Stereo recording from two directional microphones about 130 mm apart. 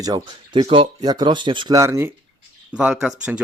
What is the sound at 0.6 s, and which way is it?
Speech, 40° right (ahead or behind).